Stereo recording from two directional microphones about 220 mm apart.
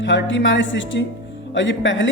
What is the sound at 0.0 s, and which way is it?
Speech, 55° left (ahead or behind).